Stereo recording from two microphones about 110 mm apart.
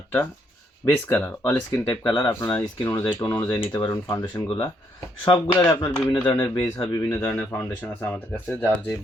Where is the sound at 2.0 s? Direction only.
40° left (ahead or behind).